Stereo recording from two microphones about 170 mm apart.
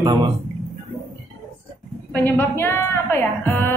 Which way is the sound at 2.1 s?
10° left (ahead or behind).